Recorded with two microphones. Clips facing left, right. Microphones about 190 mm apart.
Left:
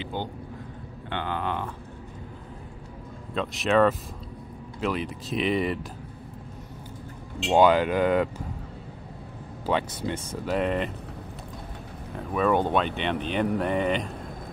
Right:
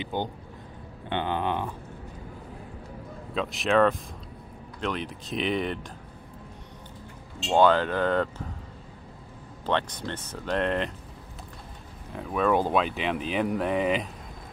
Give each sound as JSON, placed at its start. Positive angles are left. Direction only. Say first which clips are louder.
{"t": 0.0, "sound": "a sound", "louder": "right 2 dB", "side_deg": -15}
{"t": 1.1, "sound": "speech", "louder": "right 2 dB", "side_deg": -20}
{"t": 3.3, "sound": "speech", "louder": "left 1 dB", "side_deg": 0}
{"t": 7.4, "sound": "speech", "louder": "left 2 dB", "side_deg": 15}
{"t": 9.7, "sound": "speech", "louder": "left 2 dB", "side_deg": 10}
{"t": 12.2, "sound": "speech", "louder": "left 1 dB", "side_deg": 0}